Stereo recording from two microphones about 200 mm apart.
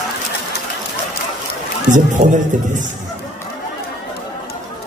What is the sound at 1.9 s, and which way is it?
A man's voice, 40° right (ahead or behind).